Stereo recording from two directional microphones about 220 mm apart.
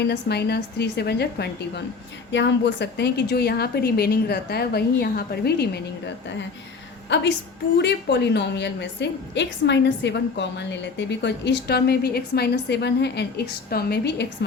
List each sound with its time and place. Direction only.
0.0 s a woman's voice: 50° left (ahead or behind)
7.1 s a woman's voice: 50° left (ahead or behind)